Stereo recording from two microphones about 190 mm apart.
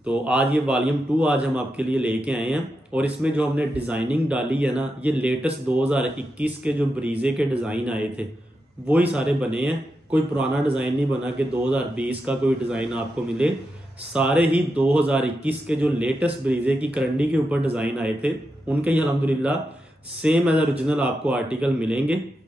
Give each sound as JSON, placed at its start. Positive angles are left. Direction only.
{"t": 0.0, "sound": "a man's voice", "side_deg": -5}